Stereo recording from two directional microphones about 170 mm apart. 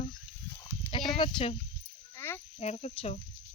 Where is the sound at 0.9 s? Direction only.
10° left (ahead or behind).